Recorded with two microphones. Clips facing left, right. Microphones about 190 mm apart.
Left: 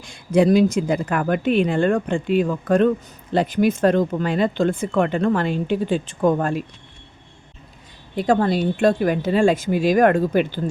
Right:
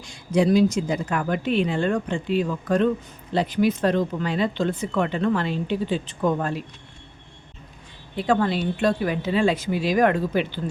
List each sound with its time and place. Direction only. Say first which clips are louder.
0.0 s speech: left 4 dB; 55° left (ahead or behind)
8.1 s speech: left 3 dB; 40° left (ahead or behind)